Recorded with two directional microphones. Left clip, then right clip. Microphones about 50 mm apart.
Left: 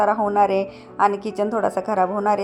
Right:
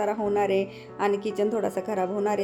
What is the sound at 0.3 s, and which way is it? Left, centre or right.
A woman's voice, left.